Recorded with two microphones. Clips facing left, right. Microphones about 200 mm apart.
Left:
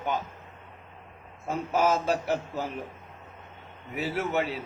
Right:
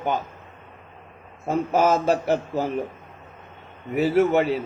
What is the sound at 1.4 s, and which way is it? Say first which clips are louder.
A man's voice: right 5 dB; 45° right (ahead or behind).